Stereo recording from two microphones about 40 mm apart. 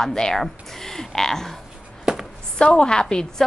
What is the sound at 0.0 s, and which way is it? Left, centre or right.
A woman's voice, centre.